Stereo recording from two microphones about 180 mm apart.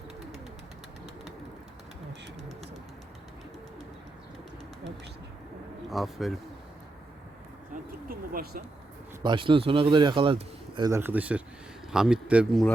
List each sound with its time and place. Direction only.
5.9 s speech: centre (ahead or behind)
7.7 s a sound: 55° right (ahead or behind)
9.2 s a man's voice: 25° right (ahead or behind); by 12.7 s centre (ahead or behind)